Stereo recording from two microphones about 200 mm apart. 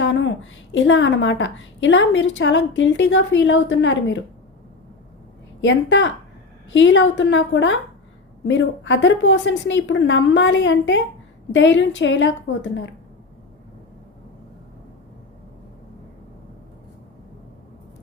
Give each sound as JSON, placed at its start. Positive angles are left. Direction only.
{"t": 0.0, "sound": "a woman's voice", "side_deg": 70}
{"t": 5.6, "sound": "a woman's voice", "side_deg": 65}